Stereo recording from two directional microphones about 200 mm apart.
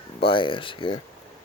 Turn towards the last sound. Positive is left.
turn(degrees=25)  # may be behind; listen again after turning